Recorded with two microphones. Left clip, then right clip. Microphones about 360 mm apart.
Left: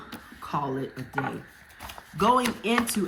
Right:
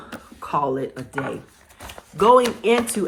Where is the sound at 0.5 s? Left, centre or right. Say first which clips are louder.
Right 8 dB; right.